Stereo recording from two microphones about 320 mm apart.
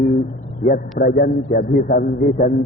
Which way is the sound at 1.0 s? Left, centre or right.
Left.